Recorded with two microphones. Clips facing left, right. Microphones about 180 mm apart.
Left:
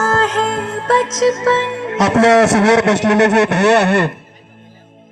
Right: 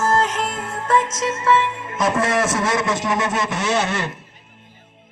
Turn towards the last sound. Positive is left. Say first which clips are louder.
# left 7 dB
turn(degrees=45)  # may be behind; listen again after turning